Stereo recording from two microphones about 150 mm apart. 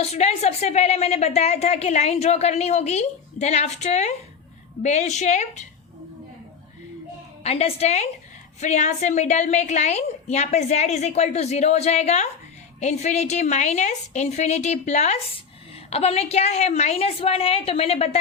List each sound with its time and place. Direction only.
0.0 s a woman's voice: 45° left (ahead or behind)
7.4 s a woman's voice: 40° left (ahead or behind)